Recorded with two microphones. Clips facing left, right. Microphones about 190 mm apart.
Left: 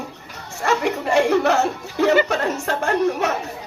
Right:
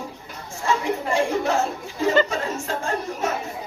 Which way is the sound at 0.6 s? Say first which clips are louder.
Left 3 dB; 75° left (ahead or behind).